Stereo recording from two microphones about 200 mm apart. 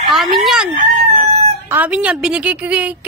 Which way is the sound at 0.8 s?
35° right (ahead or behind).